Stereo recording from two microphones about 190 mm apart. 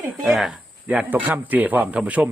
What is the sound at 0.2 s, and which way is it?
Speech, 5° right (ahead or behind).